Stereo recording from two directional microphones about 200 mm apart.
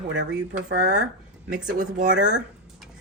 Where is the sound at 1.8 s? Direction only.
40° right (ahead or behind).